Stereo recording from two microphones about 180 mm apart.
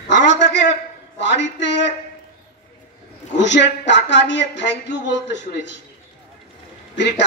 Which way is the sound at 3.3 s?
80° left.